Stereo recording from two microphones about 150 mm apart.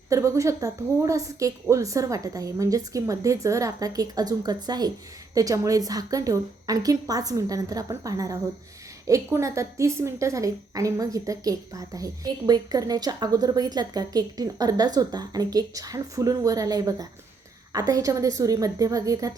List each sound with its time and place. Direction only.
0.1 s a woman's voice: 20° right (ahead or behind)